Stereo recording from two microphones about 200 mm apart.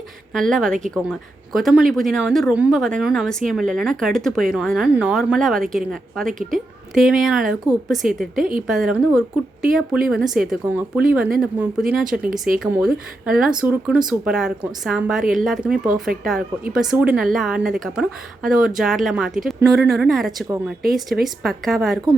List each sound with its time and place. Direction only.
0.3 s speech: centre (ahead or behind)
15.2 s speech: 40° right (ahead or behind)
15.4 s speech: centre (ahead or behind)